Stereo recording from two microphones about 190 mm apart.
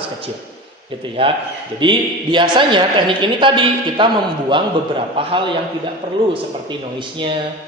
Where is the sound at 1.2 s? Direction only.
30° right (ahead or behind).